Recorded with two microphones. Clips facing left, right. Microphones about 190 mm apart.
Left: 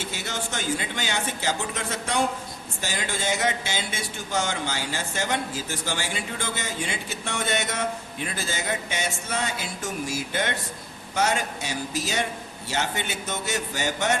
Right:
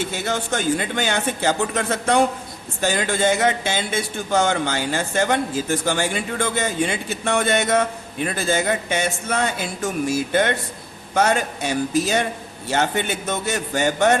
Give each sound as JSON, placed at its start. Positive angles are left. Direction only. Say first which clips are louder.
{"t": 0.1, "sound": "speech", "louder": "right 8 dB", "side_deg": -55}